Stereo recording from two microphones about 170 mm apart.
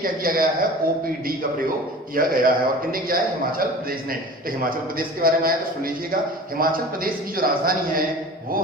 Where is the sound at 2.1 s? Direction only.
55° right (ahead or behind).